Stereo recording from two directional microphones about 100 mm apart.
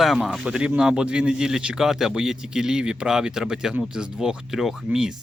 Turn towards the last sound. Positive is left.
turn(degrees=-5)  # may be behind; listen again after turning